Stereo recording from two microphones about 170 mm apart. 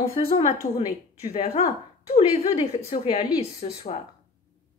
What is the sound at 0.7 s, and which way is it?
Speech, 30° left (ahead or behind).